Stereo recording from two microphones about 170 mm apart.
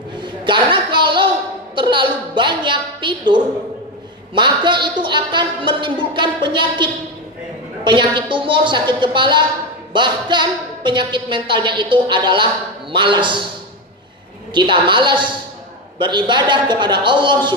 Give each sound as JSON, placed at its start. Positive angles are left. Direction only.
{"t": 0.2, "sound": "a sound", "side_deg": -30}
{"t": 1.8, "sound": "a woman's voice", "side_deg": -30}
{"t": 14.5, "sound": "a woman's voice", "side_deg": -30}